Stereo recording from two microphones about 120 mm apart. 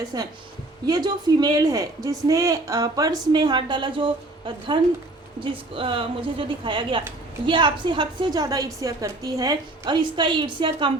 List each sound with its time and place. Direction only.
0.1 s a woman's voice: 30° right (ahead or behind)